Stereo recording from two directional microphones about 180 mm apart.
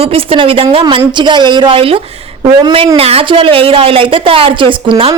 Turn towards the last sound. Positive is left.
turn(degrees=-30)  # may be behind; listen again after turning